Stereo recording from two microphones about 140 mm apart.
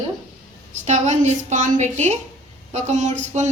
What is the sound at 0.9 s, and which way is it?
A woman's voice, 55° right (ahead or behind).